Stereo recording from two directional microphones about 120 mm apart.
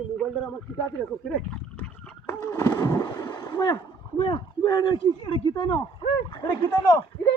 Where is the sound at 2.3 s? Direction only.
20° left (ahead or behind).